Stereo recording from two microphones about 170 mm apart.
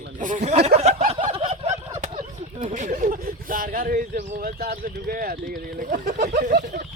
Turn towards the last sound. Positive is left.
turn(degrees=-60)  # may be behind; listen again after turning